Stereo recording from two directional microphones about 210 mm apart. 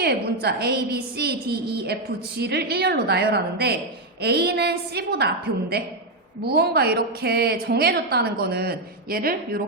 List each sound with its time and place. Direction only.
0.0 s a woman's voice: 50° right (ahead or behind)